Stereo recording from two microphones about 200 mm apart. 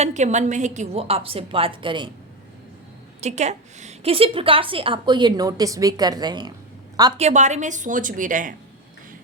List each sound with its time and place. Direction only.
0.0 s a woman's voice: 35° right (ahead or behind)
3.2 s a woman's voice: 35° right (ahead or behind)
7.2 s a woman's voice: 35° right (ahead or behind)